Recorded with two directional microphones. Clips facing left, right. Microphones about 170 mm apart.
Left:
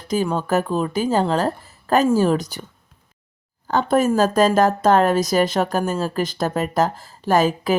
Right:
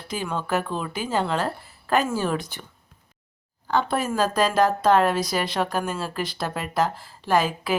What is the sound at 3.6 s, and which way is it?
Speech, 45° left (ahead or behind).